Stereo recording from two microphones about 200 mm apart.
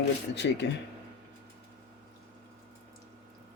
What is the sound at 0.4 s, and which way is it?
Speech, 60° left (ahead or behind).